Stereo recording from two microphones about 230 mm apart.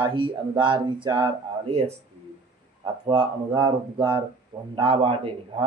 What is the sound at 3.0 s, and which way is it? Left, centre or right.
Speech, right.